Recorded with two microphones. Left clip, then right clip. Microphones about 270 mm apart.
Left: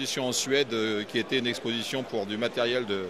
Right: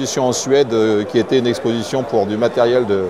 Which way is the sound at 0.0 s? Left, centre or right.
Centre.